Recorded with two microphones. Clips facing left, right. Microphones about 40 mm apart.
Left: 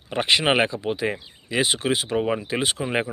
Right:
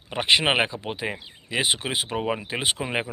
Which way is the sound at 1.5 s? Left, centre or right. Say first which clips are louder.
Left 3 dB; centre.